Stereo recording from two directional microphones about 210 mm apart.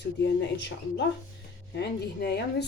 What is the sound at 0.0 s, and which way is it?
Speech, 55° left (ahead or behind).